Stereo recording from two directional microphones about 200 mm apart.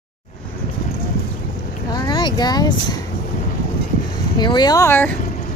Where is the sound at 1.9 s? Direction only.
20° left (ahead or behind).